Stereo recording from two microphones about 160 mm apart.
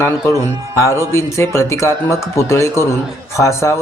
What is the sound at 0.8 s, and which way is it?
Speech, 15° left (ahead or behind).